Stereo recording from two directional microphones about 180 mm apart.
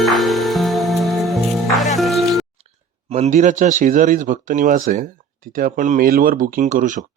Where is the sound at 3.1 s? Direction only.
40° right (ahead or behind).